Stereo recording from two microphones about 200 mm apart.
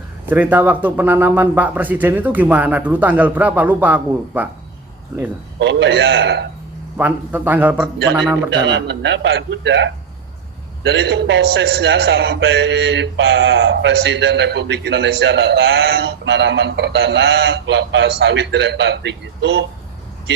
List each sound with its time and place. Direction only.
0.3 s speech: 10° right (ahead or behind)
5.5 s a man's voice: 60° right (ahead or behind)
6.9 s speech: 10° right (ahead or behind)
8.4 s a man's voice: 60° right (ahead or behind)